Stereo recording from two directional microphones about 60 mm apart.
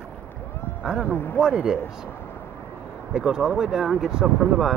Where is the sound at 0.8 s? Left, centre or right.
Centre.